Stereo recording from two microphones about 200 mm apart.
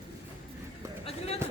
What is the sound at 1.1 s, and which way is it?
Run, 30° left (ahead or behind).